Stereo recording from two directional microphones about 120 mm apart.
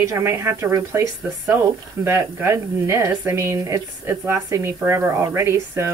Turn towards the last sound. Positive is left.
turn(degrees=-20)  # may be behind; listen again after turning